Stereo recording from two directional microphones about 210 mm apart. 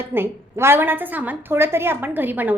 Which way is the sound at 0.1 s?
10° right (ahead or behind).